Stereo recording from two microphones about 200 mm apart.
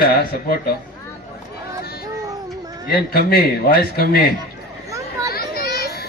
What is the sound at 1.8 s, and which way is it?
Child singing, 50° left (ahead or behind).